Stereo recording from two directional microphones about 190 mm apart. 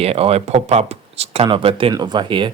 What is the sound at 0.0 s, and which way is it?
Speech, 30° right (ahead or behind).